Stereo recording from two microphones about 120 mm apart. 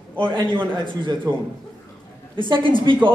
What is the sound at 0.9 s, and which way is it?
Speech, 40° right (ahead or behind).